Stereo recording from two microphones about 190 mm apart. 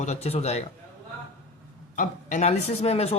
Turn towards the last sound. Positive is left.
turn(degrees=35)  # may be behind; listen again after turning